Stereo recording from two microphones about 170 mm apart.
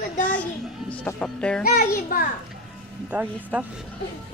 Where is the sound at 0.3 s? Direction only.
10° left (ahead or behind).